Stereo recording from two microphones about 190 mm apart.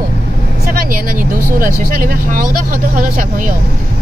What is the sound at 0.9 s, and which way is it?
Speech, 50° right (ahead or behind).